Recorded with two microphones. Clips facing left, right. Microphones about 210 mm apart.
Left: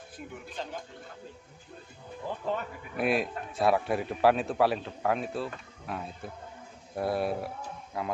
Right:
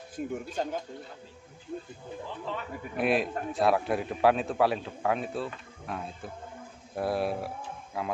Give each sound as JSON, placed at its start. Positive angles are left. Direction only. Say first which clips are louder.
{"t": 0.1, "sound": "speech", "louder": "right 10 dB", "side_deg": -45}
{"t": 2.2, "sound": "speech", "louder": "left 6 dB", "side_deg": 45}
{"t": 3.0, "sound": "a man's voice", "louder": "right 1 dB", "side_deg": 0}